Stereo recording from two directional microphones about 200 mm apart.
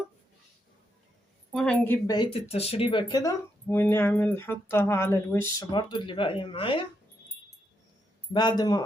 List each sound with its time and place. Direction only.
1.5 s speech: 5° left (ahead or behind)
2.1 s speech: 25° left (ahead or behind)
5.7 s speech: 25° left (ahead or behind)
8.3 s speech: 20° left (ahead or behind)